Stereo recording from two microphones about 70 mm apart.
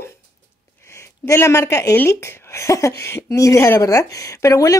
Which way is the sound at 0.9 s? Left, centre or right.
Left.